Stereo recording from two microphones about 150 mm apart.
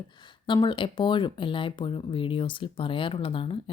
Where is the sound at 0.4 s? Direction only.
30° left (ahead or behind).